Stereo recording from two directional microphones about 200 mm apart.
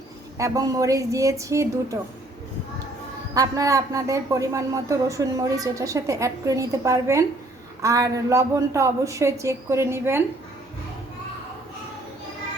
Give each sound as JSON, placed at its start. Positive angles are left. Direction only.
{"t": 0.3, "sound": "speech", "side_deg": -15}
{"t": 3.3, "sound": "speech", "side_deg": -15}